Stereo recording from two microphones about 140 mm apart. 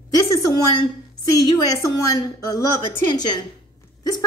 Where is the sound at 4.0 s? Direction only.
30° left (ahead or behind).